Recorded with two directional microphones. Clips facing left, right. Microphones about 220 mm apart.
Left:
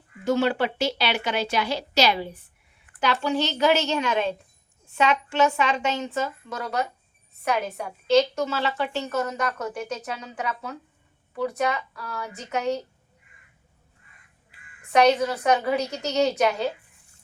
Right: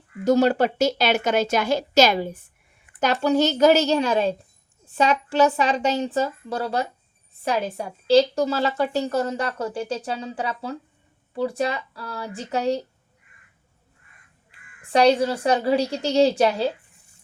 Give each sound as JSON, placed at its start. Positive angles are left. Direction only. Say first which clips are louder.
{"t": 0.3, "sound": "a woman's voice", "louder": "right 5 dB", "side_deg": -40}
{"t": 14.8, "sound": "a woman's voice", "louder": "right 2 dB", "side_deg": -30}